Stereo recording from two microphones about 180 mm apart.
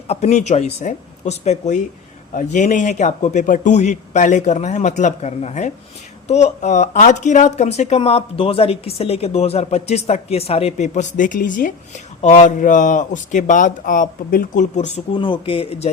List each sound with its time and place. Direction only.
0.1 s a man's voice: 40° left (ahead or behind)
15.1 s speech: 25° left (ahead or behind)